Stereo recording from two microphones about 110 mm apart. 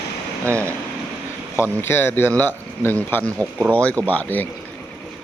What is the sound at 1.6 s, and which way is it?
Speech, 20° left (ahead or behind).